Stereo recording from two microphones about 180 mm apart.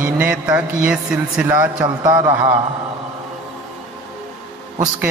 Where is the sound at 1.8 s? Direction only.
25° right (ahead or behind).